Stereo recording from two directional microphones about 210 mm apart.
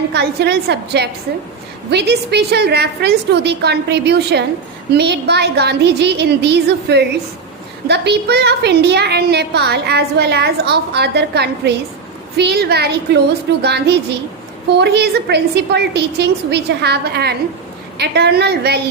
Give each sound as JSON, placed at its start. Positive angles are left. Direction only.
{"t": 0.1, "sound": "a woman's voice", "side_deg": -50}